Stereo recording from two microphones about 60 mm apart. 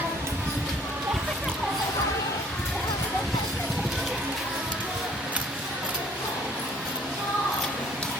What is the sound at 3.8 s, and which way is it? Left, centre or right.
Music, centre.